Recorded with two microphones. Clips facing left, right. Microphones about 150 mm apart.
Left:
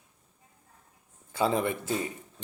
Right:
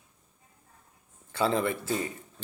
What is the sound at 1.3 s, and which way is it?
Speech, 15° left (ahead or behind).